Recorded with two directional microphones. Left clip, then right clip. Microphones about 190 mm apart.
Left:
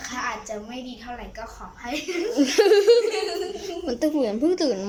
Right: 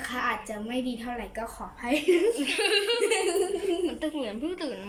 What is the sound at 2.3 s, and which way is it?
A woman's voice, 35° left (ahead or behind).